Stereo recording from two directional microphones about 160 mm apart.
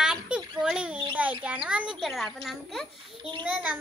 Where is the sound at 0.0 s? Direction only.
5° right (ahead or behind).